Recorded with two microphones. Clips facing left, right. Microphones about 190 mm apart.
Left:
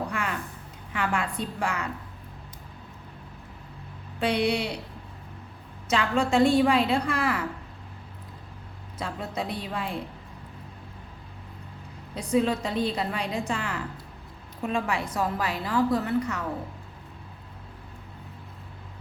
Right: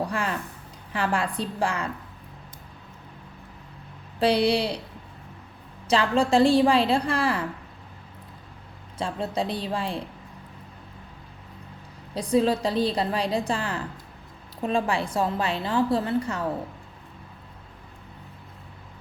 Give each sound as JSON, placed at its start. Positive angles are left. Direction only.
{"t": 0.1, "sound": "a sound", "side_deg": -30}
{"t": 0.9, "sound": "a woman's voice", "side_deg": -35}
{"t": 4.2, "sound": "a woman's voice", "side_deg": -35}
{"t": 5.9, "sound": "a woman's voice", "side_deg": -30}
{"t": 9.0, "sound": "a woman's voice", "side_deg": -30}
{"t": 12.1, "sound": "a woman's voice", "side_deg": -35}